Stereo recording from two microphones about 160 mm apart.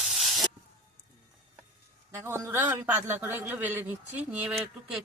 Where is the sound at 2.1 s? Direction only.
15° right (ahead or behind).